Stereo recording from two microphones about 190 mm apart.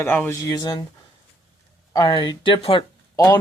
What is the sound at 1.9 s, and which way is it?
Speech, 20° left (ahead or behind).